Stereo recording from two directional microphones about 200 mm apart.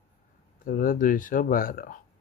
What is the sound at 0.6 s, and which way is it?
Speech, 45° left (ahead or behind).